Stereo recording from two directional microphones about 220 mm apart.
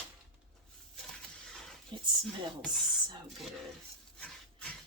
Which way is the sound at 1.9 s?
20° right (ahead or behind).